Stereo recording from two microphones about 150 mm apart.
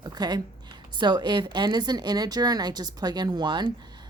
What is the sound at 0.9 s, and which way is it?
Speech, 30° right (ahead or behind).